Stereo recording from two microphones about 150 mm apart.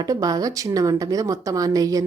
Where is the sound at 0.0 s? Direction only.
25° right (ahead or behind).